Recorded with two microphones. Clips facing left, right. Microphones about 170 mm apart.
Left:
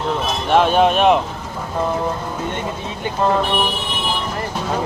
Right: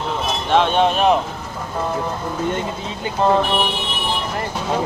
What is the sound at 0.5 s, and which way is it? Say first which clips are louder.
Speech: left 2 dB; 5° left (ahead or behind).